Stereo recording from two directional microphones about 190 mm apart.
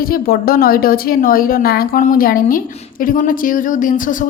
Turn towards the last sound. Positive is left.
turn(degrees=45)  # may be behind; listen again after turning